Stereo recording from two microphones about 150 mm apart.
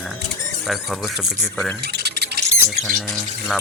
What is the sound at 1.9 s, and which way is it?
Mouse, 90° right.